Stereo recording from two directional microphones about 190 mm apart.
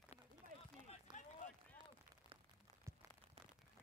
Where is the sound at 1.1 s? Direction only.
25° right (ahead or behind).